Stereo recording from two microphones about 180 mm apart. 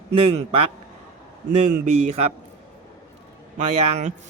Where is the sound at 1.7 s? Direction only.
40° right (ahead or behind).